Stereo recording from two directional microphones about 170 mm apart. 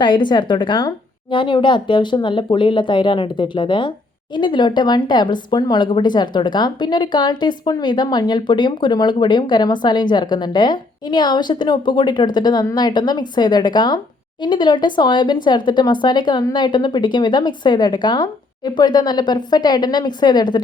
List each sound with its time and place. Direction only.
0.0 s speech: 25° left (ahead or behind)